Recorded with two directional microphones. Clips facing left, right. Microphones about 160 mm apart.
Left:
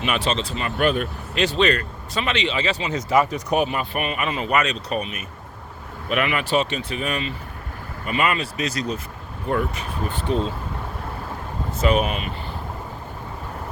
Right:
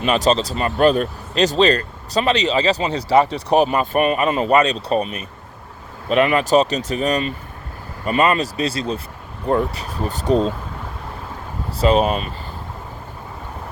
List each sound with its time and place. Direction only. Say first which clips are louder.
0.0 s speech: right 6 dB; 35° right (ahead or behind)
6.1 s speech: right 7 dB; 35° right (ahead or behind)
11.8 s speech: right 5 dB; 30° right (ahead or behind)